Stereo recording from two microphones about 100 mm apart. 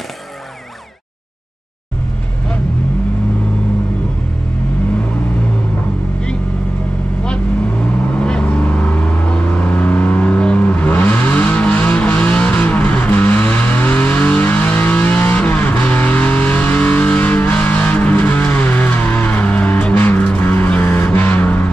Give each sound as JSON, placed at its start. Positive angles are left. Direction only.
{"t": 8.1, "sound": "vehicle", "side_deg": 10}